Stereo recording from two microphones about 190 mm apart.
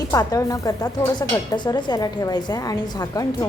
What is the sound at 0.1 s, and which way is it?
A woman's voice, 20° left (ahead or behind).